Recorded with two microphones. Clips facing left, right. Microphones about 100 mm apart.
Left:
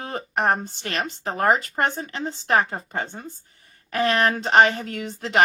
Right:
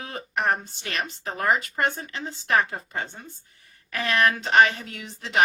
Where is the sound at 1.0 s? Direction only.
40° left (ahead or behind).